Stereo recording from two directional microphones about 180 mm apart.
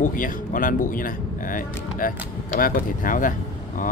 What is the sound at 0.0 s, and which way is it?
Speech, 50° left (ahead or behind).